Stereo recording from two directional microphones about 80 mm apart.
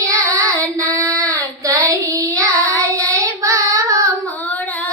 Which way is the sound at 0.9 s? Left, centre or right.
Right.